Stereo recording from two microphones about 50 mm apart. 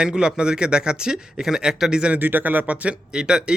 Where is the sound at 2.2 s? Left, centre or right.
Right.